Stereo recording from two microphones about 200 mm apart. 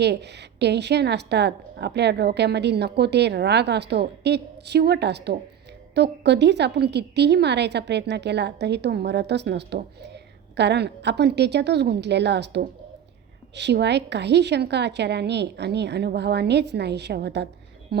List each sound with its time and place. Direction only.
0.0 s a woman's voice: 55° right (ahead or behind)